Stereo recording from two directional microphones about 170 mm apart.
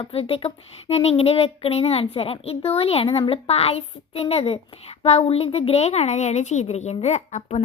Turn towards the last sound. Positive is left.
turn(degrees=40)  # may be behind; listen again after turning